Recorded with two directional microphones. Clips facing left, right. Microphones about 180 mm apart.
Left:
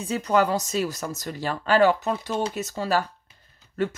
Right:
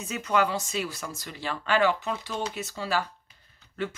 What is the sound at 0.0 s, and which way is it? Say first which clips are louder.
Speech: left 4 dB; 35° left (ahead or behind).